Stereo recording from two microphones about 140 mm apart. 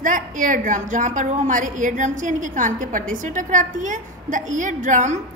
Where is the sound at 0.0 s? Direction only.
70° right (ahead or behind).